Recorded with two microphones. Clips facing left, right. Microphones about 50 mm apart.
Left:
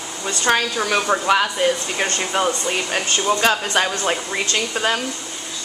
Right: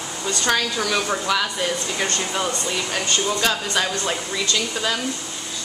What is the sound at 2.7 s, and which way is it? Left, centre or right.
Speech, left.